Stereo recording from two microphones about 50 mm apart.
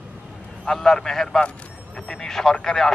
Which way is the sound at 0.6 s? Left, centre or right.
Centre.